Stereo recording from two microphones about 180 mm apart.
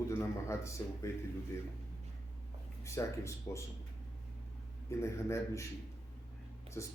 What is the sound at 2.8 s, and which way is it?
Speech, 15° left (ahead or behind).